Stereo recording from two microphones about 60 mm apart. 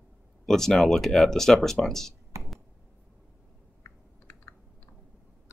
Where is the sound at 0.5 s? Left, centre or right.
Centre.